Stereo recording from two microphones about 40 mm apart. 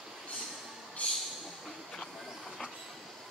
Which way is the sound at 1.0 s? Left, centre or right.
Left.